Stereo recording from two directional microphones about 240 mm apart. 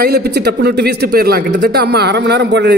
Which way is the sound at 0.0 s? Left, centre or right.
Right.